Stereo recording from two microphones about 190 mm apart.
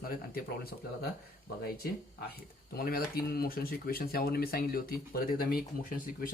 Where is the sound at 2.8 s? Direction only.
50° left (ahead or behind).